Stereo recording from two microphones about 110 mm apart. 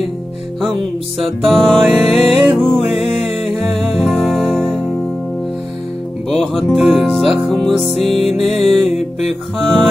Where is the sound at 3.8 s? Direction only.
Centre (ahead or behind).